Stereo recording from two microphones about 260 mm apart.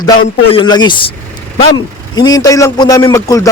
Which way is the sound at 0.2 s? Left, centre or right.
Centre.